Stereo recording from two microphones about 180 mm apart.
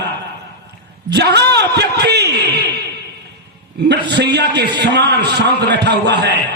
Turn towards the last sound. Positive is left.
turn(degrees=-65)  # may be behind; listen again after turning